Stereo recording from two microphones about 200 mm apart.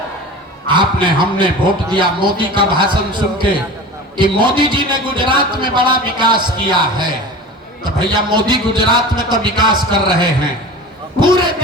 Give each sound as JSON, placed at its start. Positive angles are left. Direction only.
{"t": 0.7, "sound": "speech", "side_deg": -25}